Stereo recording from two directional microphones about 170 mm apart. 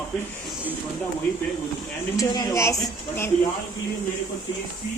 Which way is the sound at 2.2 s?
20° left (ahead or behind).